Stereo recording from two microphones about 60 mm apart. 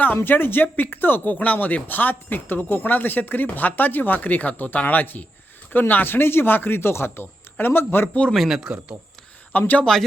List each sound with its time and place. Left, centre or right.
0.2 s speech: left
8.3 s speech: centre
9.5 s speech: left